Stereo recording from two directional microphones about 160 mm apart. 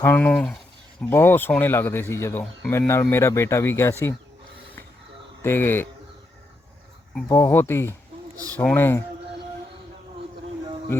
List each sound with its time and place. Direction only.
0.0 s speech: 10° left (ahead or behind)
5.4 s speech: 15° left (ahead or behind)
7.3 s speech: 15° left (ahead or behind)